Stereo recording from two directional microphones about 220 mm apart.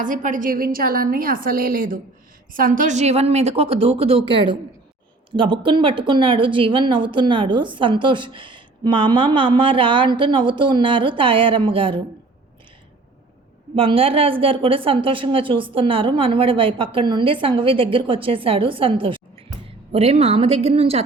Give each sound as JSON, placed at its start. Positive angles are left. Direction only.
{"t": 0.0, "sound": "a woman's voice", "side_deg": -35}
{"t": 13.7, "sound": "a woman's voice", "side_deg": -25}